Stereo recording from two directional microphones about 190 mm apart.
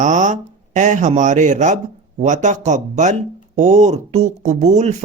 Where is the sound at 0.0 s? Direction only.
40° right (ahead or behind).